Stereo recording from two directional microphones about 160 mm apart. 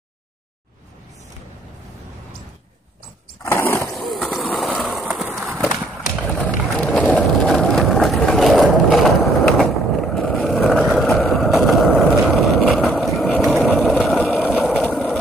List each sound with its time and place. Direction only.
3.4 s vehicle: 15° left (ahead or behind)
3.9 s vehicle: centre (ahead or behind)
4.5 s a sound: 5° left (ahead or behind)
6.4 s vehicle: 5° left (ahead or behind)